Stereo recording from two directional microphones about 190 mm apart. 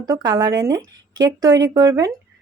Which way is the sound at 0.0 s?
20° right (ahead or behind).